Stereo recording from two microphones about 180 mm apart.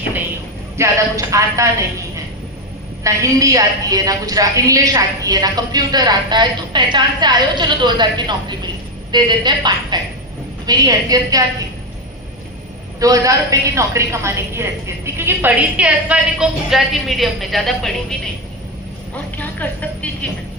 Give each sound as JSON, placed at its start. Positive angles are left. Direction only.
{"t": 0.8, "sound": "a woman's voice", "side_deg": -15}
{"t": 3.0, "sound": "a woman's voice", "side_deg": -20}
{"t": 13.0, "sound": "a woman's voice", "side_deg": -20}
{"t": 19.1, "sound": "a sound", "side_deg": 10}